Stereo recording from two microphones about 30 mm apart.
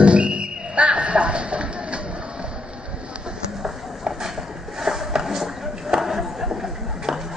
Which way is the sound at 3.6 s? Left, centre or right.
Centre.